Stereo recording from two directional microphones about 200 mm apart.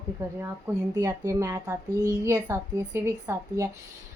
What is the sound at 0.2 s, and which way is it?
Speech, 15° right (ahead or behind).